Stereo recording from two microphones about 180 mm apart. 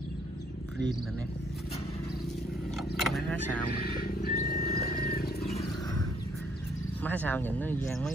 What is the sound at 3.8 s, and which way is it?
Wild animals, 55° left (ahead or behind).